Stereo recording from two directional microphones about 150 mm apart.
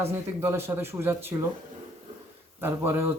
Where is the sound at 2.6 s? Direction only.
15° right (ahead or behind).